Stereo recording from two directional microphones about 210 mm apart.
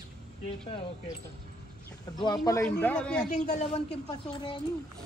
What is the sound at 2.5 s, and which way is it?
Speech, 10° left (ahead or behind).